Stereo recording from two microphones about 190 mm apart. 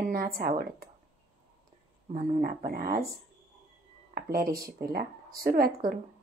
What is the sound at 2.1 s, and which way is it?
Speech, 50° right (ahead or behind).